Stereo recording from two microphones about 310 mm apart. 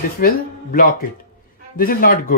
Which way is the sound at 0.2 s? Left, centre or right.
Left.